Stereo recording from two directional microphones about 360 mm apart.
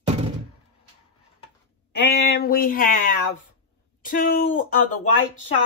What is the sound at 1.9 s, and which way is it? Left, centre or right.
Speech, left.